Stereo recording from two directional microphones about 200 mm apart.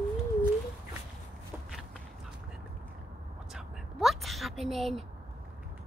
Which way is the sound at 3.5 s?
Centre (ahead or behind).